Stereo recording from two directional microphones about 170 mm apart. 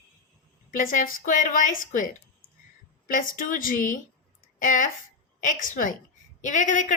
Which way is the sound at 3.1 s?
50° left (ahead or behind).